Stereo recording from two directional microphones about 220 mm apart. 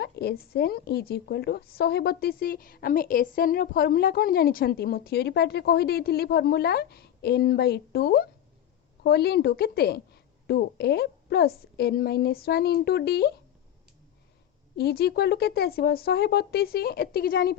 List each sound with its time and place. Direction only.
0.0 s a woman's voice: 45° left (ahead or behind)
14.8 s a woman's voice: 45° left (ahead or behind)